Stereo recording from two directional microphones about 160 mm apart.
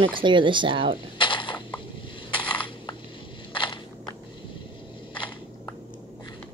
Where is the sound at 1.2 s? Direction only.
30° left (ahead or behind).